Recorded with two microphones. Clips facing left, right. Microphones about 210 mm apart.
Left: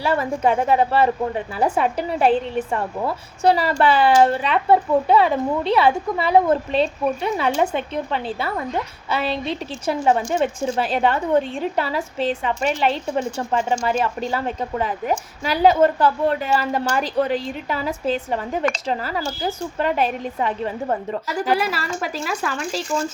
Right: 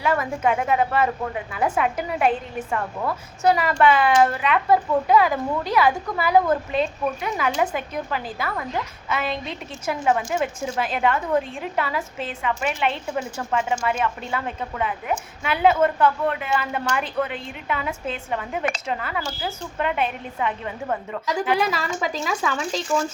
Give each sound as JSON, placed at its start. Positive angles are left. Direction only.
{"t": 0.0, "sound": "a woman's voice", "side_deg": 30}
{"t": 21.8, "sound": "speech", "side_deg": 5}